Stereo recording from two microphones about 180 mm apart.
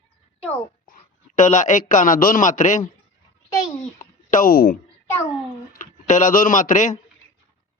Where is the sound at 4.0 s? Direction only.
50° left (ahead or behind).